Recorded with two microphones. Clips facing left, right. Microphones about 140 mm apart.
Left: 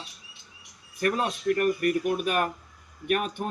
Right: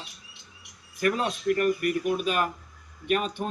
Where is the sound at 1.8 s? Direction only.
50° left (ahead or behind).